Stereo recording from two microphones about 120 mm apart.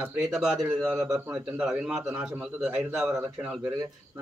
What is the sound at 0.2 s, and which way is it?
Speech, 5° right (ahead or behind).